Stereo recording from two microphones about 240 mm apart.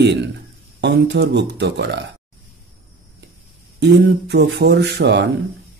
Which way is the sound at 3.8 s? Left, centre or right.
Right.